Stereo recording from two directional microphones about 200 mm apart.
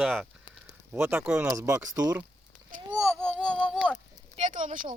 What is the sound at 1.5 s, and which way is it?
Speech, 15° right (ahead or behind).